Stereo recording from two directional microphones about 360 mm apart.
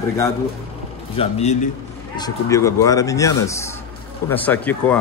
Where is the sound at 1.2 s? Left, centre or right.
Centre.